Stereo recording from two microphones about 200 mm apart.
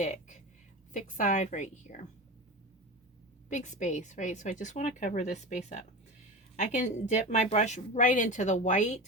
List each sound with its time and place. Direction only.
0.0 s speech: 35° left (ahead or behind)
3.5 s speech: 35° left (ahead or behind)